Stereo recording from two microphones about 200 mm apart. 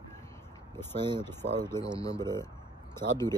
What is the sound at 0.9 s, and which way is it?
Speech, 25° right (ahead or behind).